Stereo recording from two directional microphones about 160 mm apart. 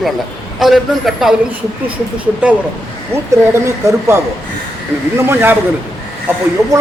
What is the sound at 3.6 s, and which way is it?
Speech, 15° right (ahead or behind).